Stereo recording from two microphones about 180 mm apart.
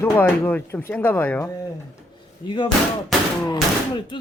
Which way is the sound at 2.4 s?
25° left (ahead or behind).